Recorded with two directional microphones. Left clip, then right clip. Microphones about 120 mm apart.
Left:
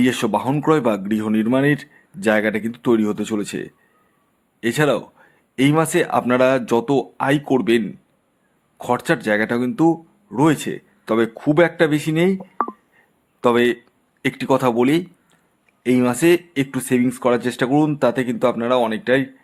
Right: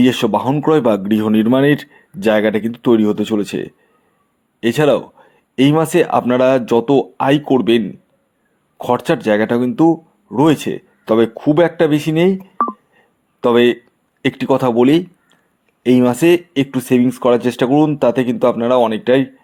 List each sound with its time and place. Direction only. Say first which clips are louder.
0.0 s speech: right 5 dB; 20° right (ahead or behind)
13.0 s a sound: right 1 dB; 20° right (ahead or behind)
14.2 s speech: right 3 dB; 20° right (ahead or behind)